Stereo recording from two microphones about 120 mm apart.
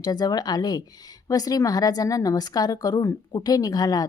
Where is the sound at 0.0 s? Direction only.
35° left (ahead or behind).